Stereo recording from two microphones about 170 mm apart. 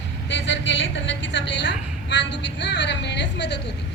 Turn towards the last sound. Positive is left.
turn(degrees=90)